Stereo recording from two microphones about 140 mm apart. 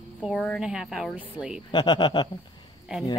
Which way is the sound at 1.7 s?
35° left (ahead or behind).